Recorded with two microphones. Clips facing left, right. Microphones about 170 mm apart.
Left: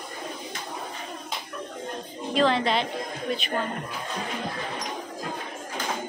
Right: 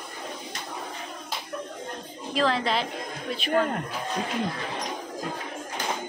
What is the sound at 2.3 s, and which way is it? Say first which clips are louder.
Speech: left 2 dB; centre (ahead or behind).